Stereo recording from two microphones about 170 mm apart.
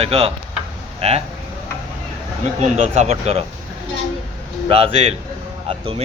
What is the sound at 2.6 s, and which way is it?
Speech, 40° right (ahead or behind).